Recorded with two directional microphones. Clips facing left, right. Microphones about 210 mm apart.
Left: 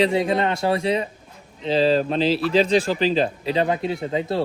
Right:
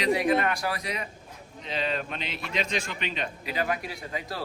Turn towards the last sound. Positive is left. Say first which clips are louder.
# left 12 dB
turn(degrees=25)  # may be behind; listen again after turning